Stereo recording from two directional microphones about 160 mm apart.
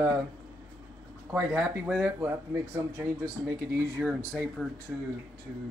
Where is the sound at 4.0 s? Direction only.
10° right (ahead or behind).